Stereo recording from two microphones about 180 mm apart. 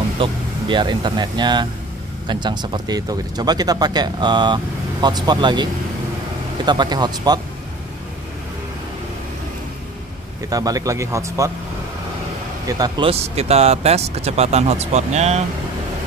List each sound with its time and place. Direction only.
0.2 s speech: 25° right (ahead or behind)
10.5 s speech: 20° right (ahead or behind)
12.6 s speech: 20° right (ahead or behind); by 15.4 s 40° right (ahead or behind)